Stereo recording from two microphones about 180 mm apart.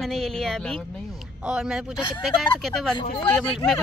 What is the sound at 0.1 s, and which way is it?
Speech, centre (ahead or behind).